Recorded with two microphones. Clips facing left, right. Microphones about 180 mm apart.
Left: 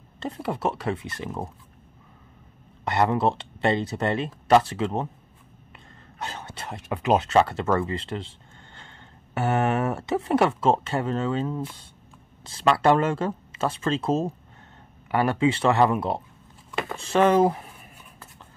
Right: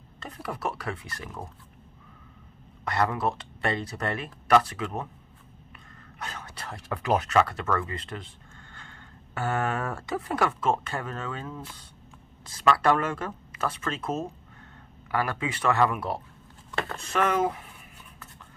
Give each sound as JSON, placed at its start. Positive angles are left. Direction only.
{"t": 0.2, "sound": "speech", "side_deg": 25}
{"t": 2.8, "sound": "speech", "side_deg": 25}
{"t": 6.1, "sound": "speech", "side_deg": 25}